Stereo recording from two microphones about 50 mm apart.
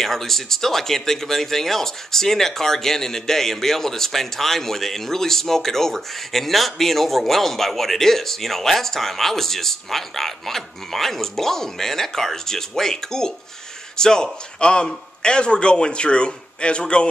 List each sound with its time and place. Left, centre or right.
0.0 s a man's voice: centre